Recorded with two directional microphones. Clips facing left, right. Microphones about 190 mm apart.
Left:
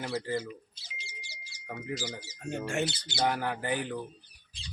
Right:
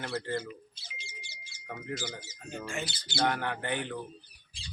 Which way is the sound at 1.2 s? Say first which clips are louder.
Left 1 dB; 35° left (ahead or behind).